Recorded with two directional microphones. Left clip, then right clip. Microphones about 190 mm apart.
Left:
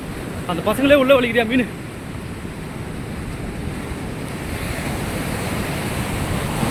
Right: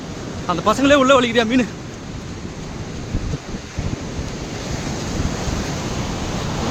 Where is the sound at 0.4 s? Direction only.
15° right (ahead or behind).